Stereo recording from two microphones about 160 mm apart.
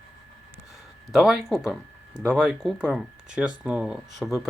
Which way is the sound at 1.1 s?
5° right (ahead or behind).